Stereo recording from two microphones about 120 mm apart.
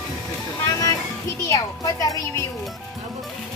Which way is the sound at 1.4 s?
30° left (ahead or behind).